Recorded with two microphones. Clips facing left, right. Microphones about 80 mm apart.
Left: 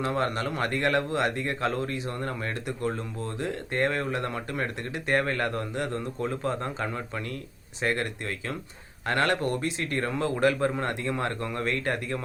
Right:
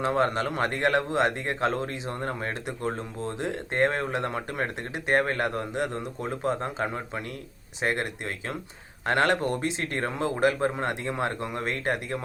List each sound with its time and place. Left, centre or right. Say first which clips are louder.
0.0 s speech: right 3 dB; right
9.0 s speech: right 2 dB; right